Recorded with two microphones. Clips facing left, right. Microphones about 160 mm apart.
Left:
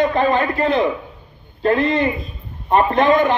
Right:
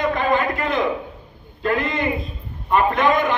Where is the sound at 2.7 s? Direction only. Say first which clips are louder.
Left 3 dB; 30° left (ahead or behind).